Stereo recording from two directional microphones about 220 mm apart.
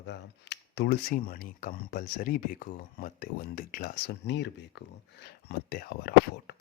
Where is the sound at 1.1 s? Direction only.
40° left (ahead or behind).